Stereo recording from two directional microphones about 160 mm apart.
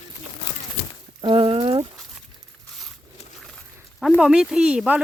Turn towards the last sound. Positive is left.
turn(degrees=-5)  # may be behind; listen again after turning